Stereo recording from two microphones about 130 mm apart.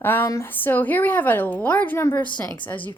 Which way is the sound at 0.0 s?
15° left (ahead or behind).